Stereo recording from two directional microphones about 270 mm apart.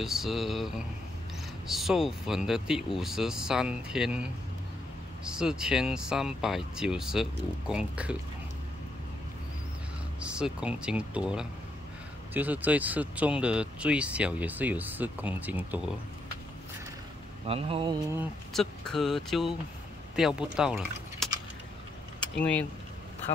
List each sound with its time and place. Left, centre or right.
0.0 s speech: centre
10.2 s speech: centre
17.5 s speech: centre
18.1 s speech: centre
22.4 s speech: centre